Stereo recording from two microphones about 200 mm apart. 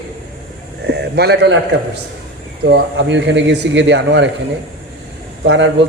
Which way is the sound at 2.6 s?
60° right (ahead or behind).